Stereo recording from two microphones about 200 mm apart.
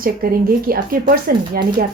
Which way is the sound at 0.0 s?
45° right (ahead or behind).